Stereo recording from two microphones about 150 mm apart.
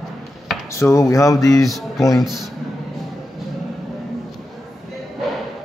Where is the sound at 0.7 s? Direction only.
20° left (ahead or behind).